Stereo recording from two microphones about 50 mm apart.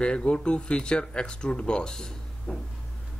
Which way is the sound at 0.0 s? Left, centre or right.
Left.